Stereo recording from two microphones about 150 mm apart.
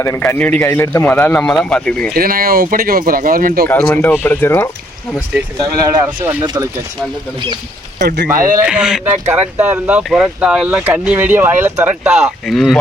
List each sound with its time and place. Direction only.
0.0 s speech: 15° left (ahead or behind)
2.1 s speech: 80° right
3.8 s speech: 10° left (ahead or behind)
6.4 s speech: 30° right (ahead or behind)
7.9 s speech: 65° right (ahead or behind)
8.6 s speech: 5° right (ahead or behind)